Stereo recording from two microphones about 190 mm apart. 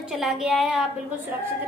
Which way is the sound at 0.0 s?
Centre (ahead or behind).